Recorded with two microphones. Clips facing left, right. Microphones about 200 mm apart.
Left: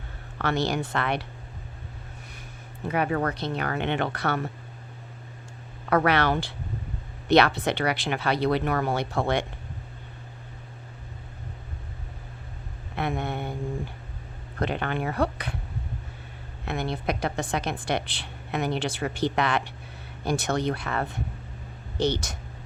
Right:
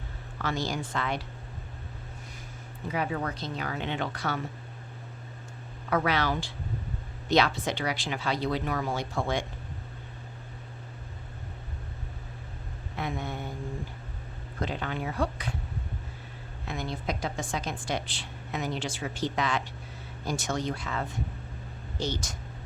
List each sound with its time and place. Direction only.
0.3 s speech: 65° left (ahead or behind)
2.8 s a woman's voice: 60° left (ahead or behind)
5.9 s a woman's voice: 65° left (ahead or behind)
13.0 s a sound: 65° left (ahead or behind)
14.6 s a woman's voice: 60° left (ahead or behind)
16.6 s a woman's voice: 65° left (ahead or behind)